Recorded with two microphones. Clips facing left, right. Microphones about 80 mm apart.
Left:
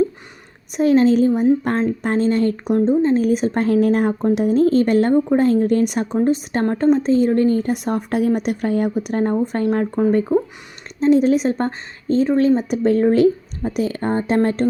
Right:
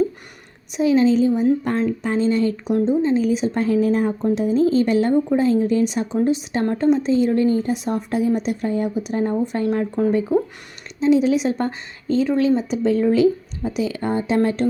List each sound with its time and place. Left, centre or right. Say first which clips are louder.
0.8 s a woman's voice: left 2 dB; left
7.6 s a woman's voice: left 2 dB; left